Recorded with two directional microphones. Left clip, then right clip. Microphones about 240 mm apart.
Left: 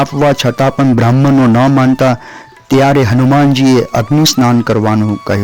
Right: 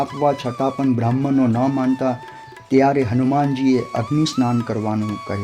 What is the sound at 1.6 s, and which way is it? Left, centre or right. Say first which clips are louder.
Speech: left 10 dB; left.